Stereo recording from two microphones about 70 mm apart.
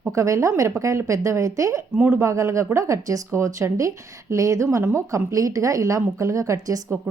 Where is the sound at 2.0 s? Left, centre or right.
Right.